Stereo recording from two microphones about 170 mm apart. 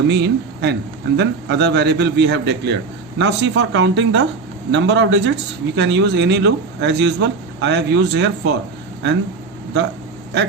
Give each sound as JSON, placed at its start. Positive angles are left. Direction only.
{"t": 0.1, "sound": "a man's voice", "side_deg": -80}